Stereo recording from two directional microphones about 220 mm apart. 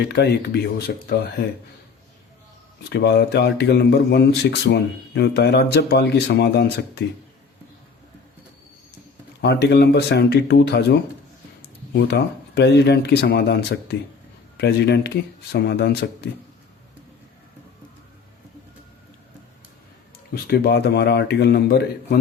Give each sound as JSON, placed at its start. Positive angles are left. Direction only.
{"t": 0.0, "sound": "speech", "side_deg": 50}
{"t": 2.9, "sound": "speech", "side_deg": 50}
{"t": 9.4, "sound": "speech", "side_deg": 50}
{"t": 11.9, "sound": "speech", "side_deg": 50}
{"t": 20.3, "sound": "speech", "side_deg": 45}